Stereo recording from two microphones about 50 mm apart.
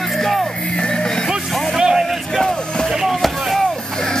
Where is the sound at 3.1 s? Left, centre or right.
Centre.